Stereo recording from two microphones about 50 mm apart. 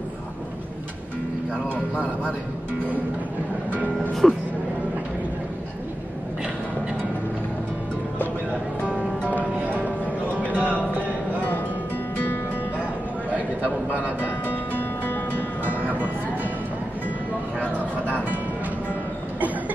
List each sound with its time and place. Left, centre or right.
1.5 s music: right
3.7 s music: right
4.1 s music: centre
9.4 s music: right
13.8 s music: right
14.4 s music: left
15.6 s music: right
17.7 s music: right